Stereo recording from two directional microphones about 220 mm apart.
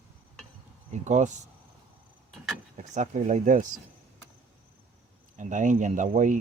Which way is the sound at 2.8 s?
30° right (ahead or behind).